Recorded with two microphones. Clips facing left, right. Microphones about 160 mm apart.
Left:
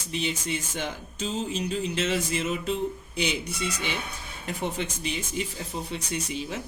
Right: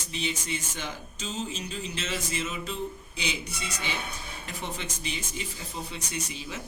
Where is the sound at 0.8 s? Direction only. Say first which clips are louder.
Left 5 dB; 60° left (ahead or behind).